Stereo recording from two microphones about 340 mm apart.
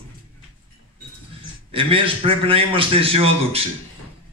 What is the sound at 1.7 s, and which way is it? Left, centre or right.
A man's voice, centre.